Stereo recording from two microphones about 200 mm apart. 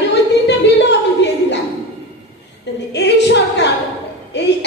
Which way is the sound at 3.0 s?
60° left (ahead or behind).